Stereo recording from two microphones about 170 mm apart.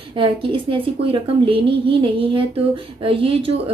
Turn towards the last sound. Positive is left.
turn(degrees=-35)  # may be behind; listen again after turning